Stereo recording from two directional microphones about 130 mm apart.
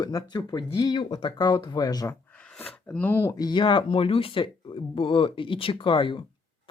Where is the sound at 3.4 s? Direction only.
35° left (ahead or behind).